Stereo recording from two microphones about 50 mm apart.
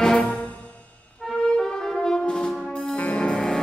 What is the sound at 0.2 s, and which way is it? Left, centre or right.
Music, left.